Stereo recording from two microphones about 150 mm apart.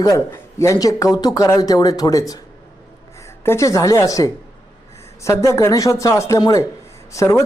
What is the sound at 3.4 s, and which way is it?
Speech, 20° left (ahead or behind).